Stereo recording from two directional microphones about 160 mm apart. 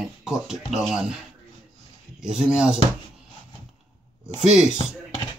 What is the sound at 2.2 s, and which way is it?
Speech, 5° right (ahead or behind).